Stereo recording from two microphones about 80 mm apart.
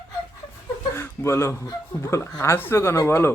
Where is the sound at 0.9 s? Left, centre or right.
Left.